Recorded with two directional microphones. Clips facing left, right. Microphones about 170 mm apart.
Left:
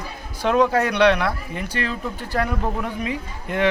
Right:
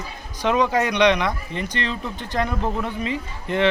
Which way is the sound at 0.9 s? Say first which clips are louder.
Left 1 dB; 5° left (ahead or behind).